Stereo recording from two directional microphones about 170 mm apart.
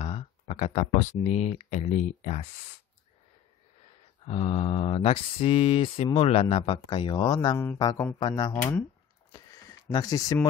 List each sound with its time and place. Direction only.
0.0 s speech: 35° left (ahead or behind)
4.3 s mantra: 35° left (ahead or behind)
7.3 s speech: 15° left (ahead or behind)
9.3 s a sound: 20° left (ahead or behind)
9.8 s speech: 20° left (ahead or behind)